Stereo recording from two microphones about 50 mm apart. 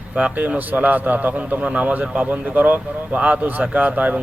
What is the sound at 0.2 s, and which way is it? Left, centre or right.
A man's voice, right.